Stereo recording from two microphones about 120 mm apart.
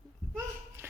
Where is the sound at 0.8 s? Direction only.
20° right (ahead or behind).